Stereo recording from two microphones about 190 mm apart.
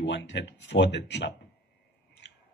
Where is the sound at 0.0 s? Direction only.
70° left (ahead or behind).